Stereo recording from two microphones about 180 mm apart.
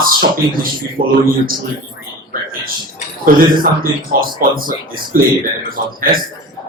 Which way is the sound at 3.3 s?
50° right (ahead or behind).